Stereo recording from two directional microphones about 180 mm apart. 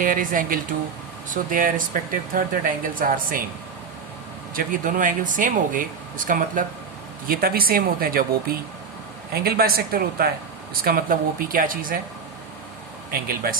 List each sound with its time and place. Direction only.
0.0 s speech: 50° right (ahead or behind)
4.5 s speech: 50° right (ahead or behind)
13.1 s speech: 55° right (ahead or behind)